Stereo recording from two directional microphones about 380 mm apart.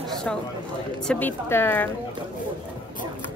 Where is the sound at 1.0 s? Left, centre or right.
Centre.